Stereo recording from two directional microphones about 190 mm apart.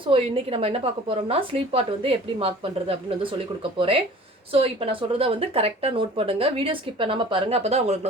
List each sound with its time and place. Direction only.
0.0 s speech: 30° right (ahead or behind)